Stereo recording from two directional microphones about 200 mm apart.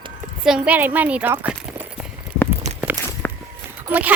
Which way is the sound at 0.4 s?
5° right (ahead or behind).